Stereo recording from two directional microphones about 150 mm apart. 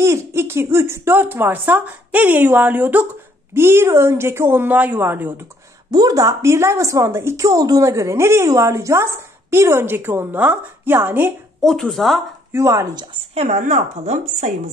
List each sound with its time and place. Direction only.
0.0 s speech: 15° right (ahead or behind)
5.9 s a woman's voice: 25° right (ahead or behind)
11.6 s speech: 5° left (ahead or behind)
12.5 s a woman's voice: 20° right (ahead or behind)
13.1 s speech: 40° right (ahead or behind)